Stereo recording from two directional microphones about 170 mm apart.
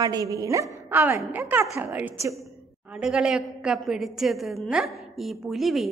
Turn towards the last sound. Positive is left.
turn(degrees=0)  # may be behind; listen again after turning